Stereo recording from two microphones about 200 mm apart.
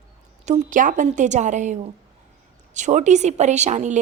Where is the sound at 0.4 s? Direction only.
40° right (ahead or behind).